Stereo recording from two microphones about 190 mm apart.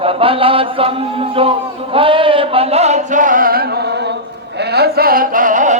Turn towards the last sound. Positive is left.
turn(degrees=-40)  # may be behind; listen again after turning